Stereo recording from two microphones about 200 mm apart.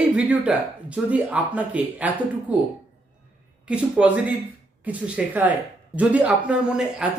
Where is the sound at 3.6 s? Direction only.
5° right (ahead or behind).